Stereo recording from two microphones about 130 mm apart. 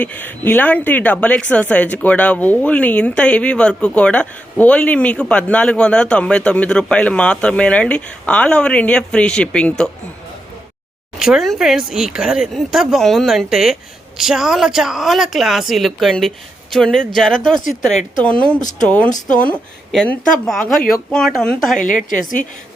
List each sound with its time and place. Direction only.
0.0 s a woman's voice: 10° left (ahead or behind)
11.2 s a woman's voice: 5° right (ahead or behind)
21.8 s a woman's voice: 85° left